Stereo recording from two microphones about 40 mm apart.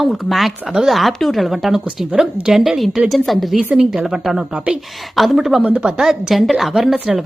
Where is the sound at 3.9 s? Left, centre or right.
Centre.